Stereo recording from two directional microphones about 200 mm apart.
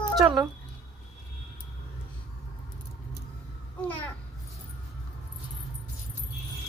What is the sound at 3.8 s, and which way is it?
Speech, 10° left (ahead or behind).